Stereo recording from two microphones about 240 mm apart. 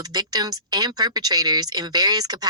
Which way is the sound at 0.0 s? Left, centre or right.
Centre.